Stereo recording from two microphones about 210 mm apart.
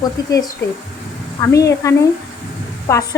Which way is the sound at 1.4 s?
15° left (ahead or behind).